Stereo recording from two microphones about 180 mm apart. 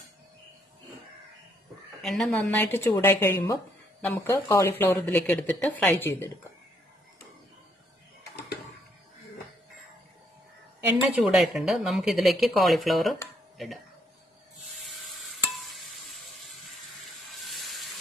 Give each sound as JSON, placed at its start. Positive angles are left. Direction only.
{"t": 2.0, "sound": "a woman's voice", "side_deg": 0}
{"t": 4.9, "sound": "a woman's voice", "side_deg": 5}
{"t": 11.2, "sound": "speech", "side_deg": 0}
{"t": 14.9, "sound": "stir", "side_deg": 0}
{"t": 17.5, "sound": "a sound", "side_deg": 0}